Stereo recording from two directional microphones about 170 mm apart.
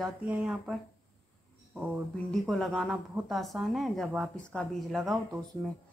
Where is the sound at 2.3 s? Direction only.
Centre (ahead or behind).